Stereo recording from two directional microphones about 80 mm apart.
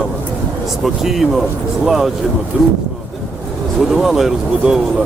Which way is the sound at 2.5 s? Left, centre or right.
Centre.